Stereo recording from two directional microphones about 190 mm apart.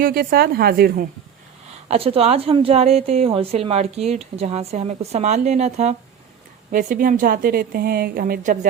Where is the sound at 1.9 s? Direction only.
30° right (ahead or behind).